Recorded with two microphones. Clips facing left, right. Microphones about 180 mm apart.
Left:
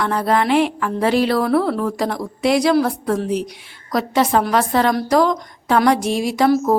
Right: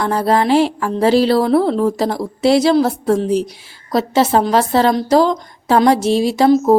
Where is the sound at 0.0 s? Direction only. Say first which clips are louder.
Right 3 dB; 30° right (ahead or behind).